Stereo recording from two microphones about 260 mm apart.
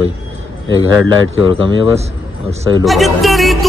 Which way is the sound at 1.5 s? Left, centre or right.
Centre.